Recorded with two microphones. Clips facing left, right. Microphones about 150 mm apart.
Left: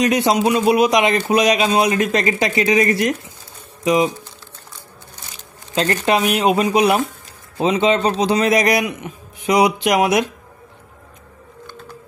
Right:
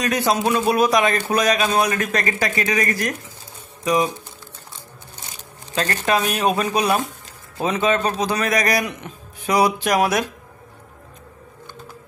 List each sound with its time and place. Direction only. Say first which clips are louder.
0.0 s a man's voice: left 4 dB; 20° left (ahead or behind)
5.8 s a man's voice: left 3 dB; 20° left (ahead or behind)
8.8 s speech: left 4 dB; 15° left (ahead or behind)